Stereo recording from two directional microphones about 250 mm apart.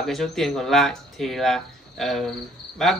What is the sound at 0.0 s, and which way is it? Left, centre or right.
Cricket, centre.